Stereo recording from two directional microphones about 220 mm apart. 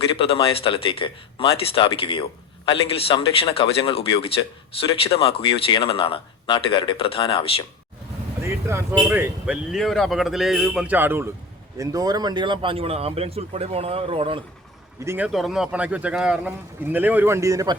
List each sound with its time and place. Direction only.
0.0 s speech: 25° left (ahead or behind)
8.4 s speech: 10° right (ahead or behind)
15.0 s speech: 10° right (ahead or behind)